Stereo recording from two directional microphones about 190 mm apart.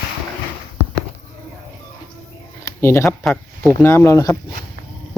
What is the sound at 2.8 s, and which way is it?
Speech, 15° left (ahead or behind).